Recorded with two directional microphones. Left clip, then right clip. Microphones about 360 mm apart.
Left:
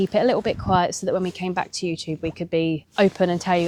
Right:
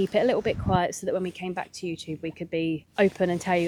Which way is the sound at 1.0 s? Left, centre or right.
Left.